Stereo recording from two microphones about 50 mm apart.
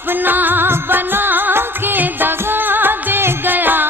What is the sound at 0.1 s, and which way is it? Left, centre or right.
Music, right.